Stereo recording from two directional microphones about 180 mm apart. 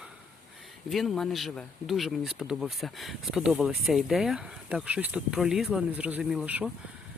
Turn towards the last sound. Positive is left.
turn(degrees=-10)  # may be behind; listen again after turning